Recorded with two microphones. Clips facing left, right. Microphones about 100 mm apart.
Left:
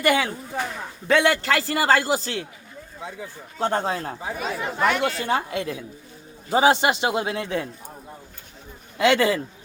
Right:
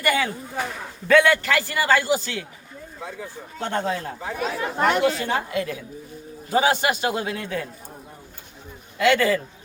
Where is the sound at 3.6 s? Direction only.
35° left (ahead or behind).